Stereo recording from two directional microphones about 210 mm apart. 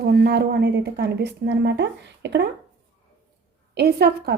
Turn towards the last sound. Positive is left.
turn(degrees=-50)  # may be behind; listen again after turning